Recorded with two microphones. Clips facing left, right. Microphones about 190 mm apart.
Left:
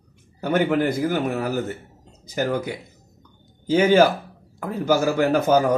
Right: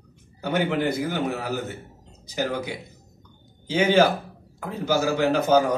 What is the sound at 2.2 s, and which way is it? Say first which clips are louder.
Speech: left 3 dB; 50° left (ahead or behind).